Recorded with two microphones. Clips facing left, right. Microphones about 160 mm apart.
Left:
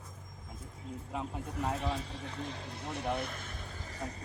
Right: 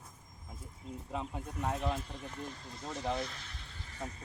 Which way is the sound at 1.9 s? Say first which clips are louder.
Left 1 dB; 80° left.